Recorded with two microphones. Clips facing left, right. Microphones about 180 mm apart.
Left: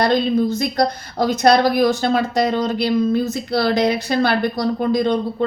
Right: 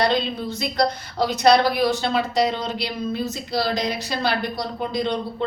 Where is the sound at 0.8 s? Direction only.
50° left (ahead or behind).